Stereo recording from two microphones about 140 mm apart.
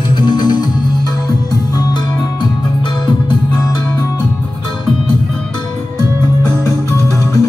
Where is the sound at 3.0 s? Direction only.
30° left (ahead or behind).